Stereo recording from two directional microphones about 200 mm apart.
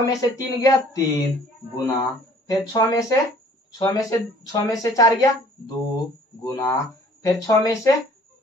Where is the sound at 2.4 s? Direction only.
20° left (ahead or behind).